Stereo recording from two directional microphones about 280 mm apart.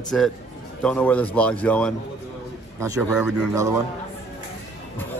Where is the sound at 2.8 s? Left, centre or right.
Centre.